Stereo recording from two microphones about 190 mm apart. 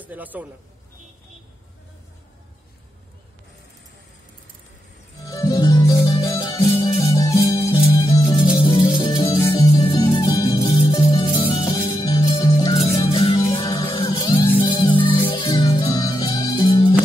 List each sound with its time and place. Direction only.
0.0 s a man's voice: 10° right (ahead or behind)
5.2 s music: 20° left (ahead or behind)
7.1 s music: 20° left (ahead or behind)